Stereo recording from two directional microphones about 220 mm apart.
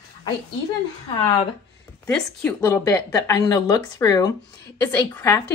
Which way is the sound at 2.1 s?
5° left (ahead or behind).